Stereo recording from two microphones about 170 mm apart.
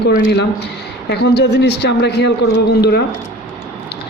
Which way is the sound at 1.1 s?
75° left (ahead or behind).